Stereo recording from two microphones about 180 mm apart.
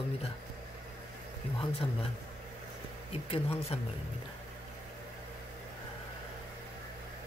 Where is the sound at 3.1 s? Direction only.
35° left (ahead or behind).